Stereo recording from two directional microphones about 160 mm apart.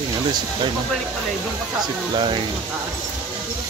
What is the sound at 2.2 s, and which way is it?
Speech, 30° right (ahead or behind).